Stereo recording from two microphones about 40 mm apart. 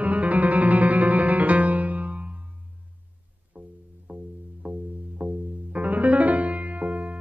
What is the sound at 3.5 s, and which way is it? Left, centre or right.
Music, right.